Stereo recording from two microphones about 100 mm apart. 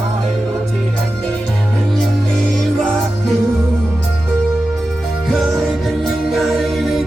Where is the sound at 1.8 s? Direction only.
5° left (ahead or behind).